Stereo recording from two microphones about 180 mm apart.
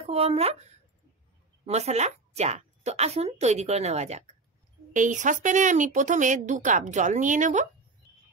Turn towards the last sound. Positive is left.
turn(degrees=-45)  # may be behind; listen again after turning